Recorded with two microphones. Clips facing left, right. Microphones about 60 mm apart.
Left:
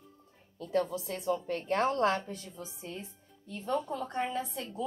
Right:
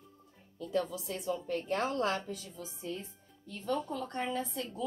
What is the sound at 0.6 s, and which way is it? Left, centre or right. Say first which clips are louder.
A woman's voice: left 3 dB; left.